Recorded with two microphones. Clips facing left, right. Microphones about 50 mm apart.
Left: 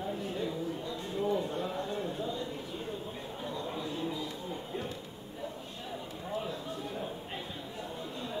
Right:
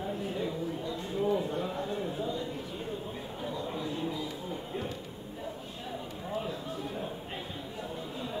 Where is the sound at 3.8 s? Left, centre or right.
Centre.